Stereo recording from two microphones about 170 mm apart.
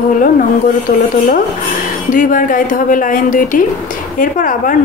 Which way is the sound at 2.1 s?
55° left (ahead or behind).